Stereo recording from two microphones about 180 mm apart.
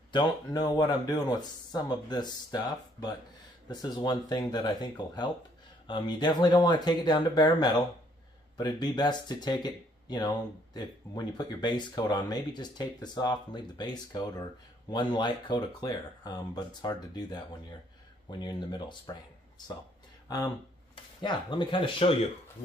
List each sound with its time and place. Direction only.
0.1 s speech: 20° left (ahead or behind)
20.9 s speech: 25° left (ahead or behind)